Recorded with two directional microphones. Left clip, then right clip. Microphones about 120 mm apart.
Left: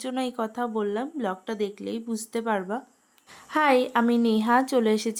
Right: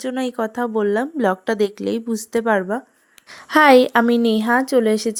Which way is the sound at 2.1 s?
50° right (ahead or behind).